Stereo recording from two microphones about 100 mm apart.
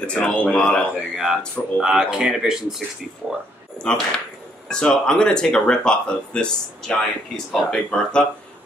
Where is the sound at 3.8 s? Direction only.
10° left (ahead or behind).